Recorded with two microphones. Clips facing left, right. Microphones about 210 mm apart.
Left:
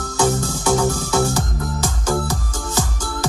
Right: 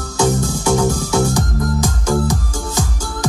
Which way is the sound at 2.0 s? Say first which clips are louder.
Right 3 dB; 10° right (ahead or behind).